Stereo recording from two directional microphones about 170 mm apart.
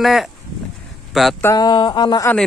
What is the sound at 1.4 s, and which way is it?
Speech, 20° left (ahead or behind).